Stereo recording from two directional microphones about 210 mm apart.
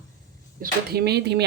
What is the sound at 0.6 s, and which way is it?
Speech, 50° right (ahead or behind).